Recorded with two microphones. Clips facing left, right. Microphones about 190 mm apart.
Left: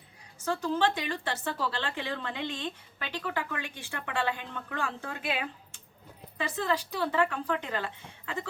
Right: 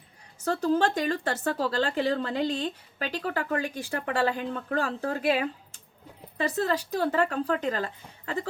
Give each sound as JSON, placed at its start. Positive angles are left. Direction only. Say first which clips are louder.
{"t": 0.4, "sound": "speech", "louder": "right 4 dB", "side_deg": -40}